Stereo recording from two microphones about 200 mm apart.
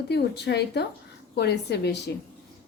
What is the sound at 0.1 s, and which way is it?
A woman's voice, 55° left (ahead or behind).